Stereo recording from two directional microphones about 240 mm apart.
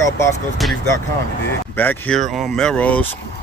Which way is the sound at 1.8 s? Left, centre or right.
Centre.